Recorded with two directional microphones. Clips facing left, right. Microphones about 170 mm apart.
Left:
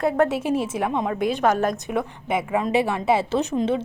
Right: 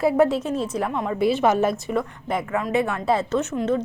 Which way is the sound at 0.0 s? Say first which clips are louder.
Right 2 dB; 5° right (ahead or behind).